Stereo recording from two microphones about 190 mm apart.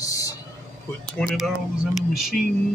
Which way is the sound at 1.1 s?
Centre (ahead or behind).